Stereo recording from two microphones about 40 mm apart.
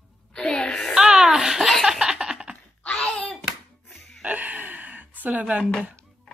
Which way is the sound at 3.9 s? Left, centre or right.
Centre.